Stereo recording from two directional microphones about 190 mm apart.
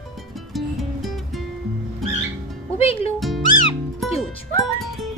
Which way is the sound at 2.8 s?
30° left (ahead or behind).